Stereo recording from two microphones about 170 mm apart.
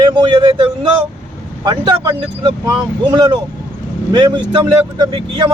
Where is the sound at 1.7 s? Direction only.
25° right (ahead or behind).